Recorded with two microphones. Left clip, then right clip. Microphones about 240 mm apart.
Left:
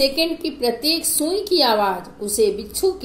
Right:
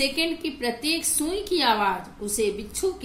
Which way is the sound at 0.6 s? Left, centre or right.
Right.